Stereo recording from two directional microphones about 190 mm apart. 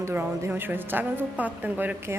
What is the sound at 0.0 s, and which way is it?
A woman's voice, 15° right (ahead or behind).